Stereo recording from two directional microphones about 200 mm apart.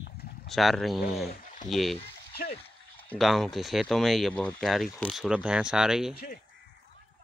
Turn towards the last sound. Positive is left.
turn(degrees=45)  # may be behind; listen again after turning